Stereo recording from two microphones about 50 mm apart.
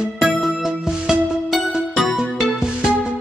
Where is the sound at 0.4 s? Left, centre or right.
Centre.